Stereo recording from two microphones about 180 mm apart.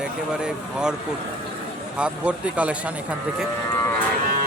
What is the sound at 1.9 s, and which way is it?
Speech, 5° right (ahead or behind).